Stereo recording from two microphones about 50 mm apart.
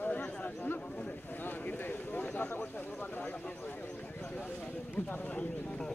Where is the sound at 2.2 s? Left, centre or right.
Left.